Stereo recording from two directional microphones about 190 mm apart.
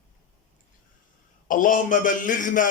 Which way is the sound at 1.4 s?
45° left (ahead or behind).